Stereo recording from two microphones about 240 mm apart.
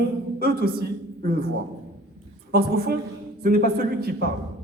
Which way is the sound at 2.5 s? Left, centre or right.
Right.